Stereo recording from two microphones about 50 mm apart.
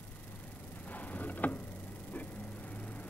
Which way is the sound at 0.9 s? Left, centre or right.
Left.